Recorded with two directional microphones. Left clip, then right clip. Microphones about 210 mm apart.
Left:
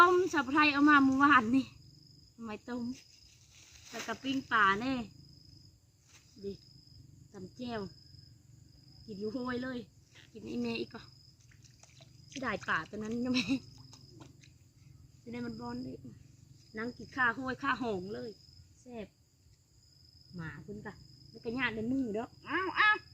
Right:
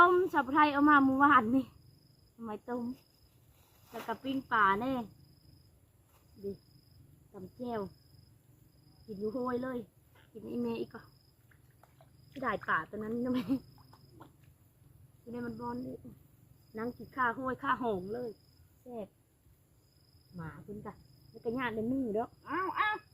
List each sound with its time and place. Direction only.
0.0 s a woman's voice: 15° left (ahead or behind)
3.9 s speech: 15° left (ahead or behind)
7.3 s speech: 15° left (ahead or behind)
9.2 s speech: 15° left (ahead or behind)
11.8 s speech: 35° left (ahead or behind)
15.3 s a woman's voice: 20° left (ahead or behind)
20.3 s a woman's voice: 20° left (ahead or behind)
22.4 s speech: 10° left (ahead or behind)